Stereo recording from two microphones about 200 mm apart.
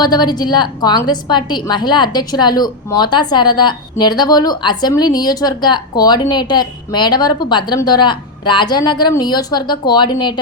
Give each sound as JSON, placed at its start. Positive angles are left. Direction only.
{"t": 0.0, "sound": "a woman's voice", "side_deg": 20}